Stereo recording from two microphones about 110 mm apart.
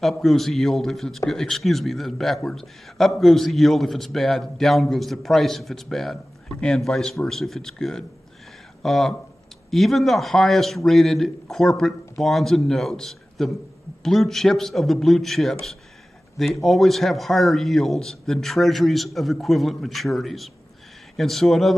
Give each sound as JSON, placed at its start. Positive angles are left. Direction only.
{"t": 0.0, "sound": "a man's voice", "side_deg": 0}